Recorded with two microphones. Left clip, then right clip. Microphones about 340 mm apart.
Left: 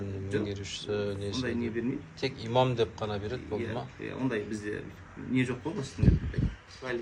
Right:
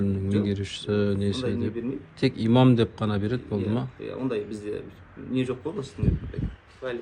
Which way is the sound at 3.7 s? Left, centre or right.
Right.